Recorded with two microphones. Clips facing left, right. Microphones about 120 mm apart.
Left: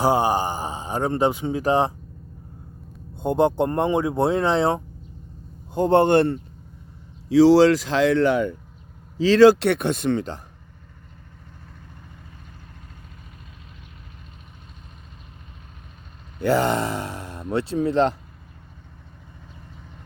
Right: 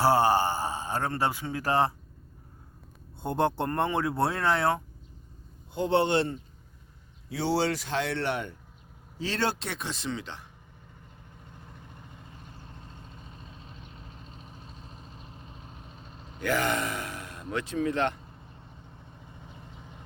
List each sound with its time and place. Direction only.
0.0 s speech: 15° left (ahead or behind)
3.2 s speech: 15° left (ahead or behind)
5.7 s a man's voice: 45° left (ahead or behind)
7.3 s speech: 90° left
9.1 s a man's voice: 90° left; by 10.4 s 45° left (ahead or behind)
16.4 s speech: 30° left (ahead or behind)